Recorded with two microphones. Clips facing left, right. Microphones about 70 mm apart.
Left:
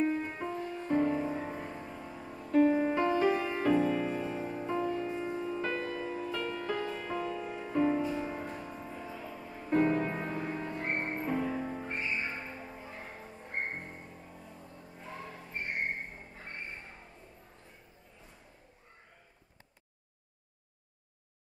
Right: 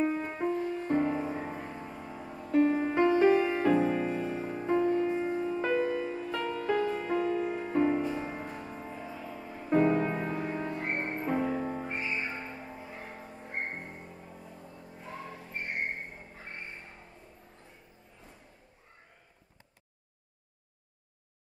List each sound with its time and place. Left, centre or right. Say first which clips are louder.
0.0 s music: right 2 dB; centre
2.6 s music: right 1 dB; right
3.3 s music: right 4 dB; centre
3.7 s music: right 2 dB; centre
6.4 s music: right 3 dB; centre
6.9 s music: right 6 dB; centre
11.2 s music: right 5 dB; centre
15.0 s music: right 2 dB; centre